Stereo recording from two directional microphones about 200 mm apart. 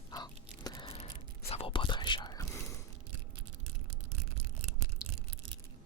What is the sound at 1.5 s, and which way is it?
Whispering, 30° left (ahead or behind).